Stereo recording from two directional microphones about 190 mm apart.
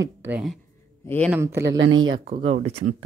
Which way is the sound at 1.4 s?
15° right (ahead or behind).